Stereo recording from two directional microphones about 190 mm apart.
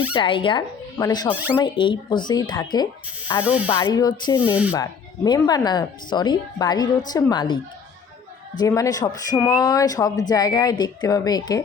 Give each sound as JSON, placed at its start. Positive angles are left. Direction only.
{"t": 0.1, "sound": "speech", "side_deg": 25}
{"t": 3.4, "sound": "speech", "side_deg": -5}
{"t": 3.7, "sound": "speech", "side_deg": 25}
{"t": 4.4, "sound": "speech", "side_deg": -5}
{"t": 4.7, "sound": "speech", "side_deg": 20}